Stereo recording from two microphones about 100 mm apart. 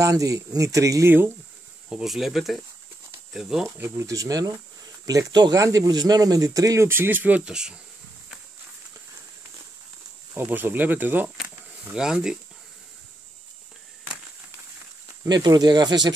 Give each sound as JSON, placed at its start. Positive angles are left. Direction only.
{"t": 0.0, "sound": "speech", "side_deg": -35}
{"t": 1.9, "sound": "speech", "side_deg": -5}
{"t": 3.7, "sound": "speech", "side_deg": -25}
{"t": 10.3, "sound": "speech", "side_deg": -20}
{"t": 11.4, "sound": "a sound", "side_deg": -10}
{"t": 15.2, "sound": "speech", "side_deg": -45}